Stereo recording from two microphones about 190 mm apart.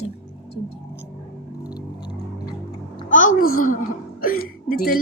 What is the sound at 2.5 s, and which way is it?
Music, 25° left (ahead or behind).